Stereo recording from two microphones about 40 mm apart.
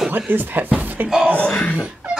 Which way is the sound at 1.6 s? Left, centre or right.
Left.